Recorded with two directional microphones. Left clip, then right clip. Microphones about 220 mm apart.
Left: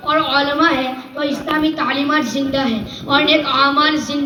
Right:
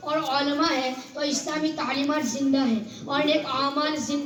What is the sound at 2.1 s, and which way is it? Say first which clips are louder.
A woman's voice: left 8 dB; 50° right (ahead or behind).